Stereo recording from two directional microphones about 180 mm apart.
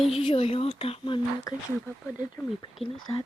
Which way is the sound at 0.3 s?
30° left (ahead or behind).